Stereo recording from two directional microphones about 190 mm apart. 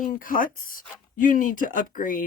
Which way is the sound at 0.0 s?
45° left (ahead or behind).